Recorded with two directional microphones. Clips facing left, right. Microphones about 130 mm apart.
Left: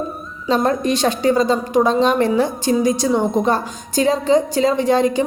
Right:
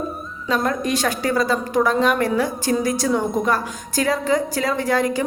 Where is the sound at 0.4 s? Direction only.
30° left (ahead or behind).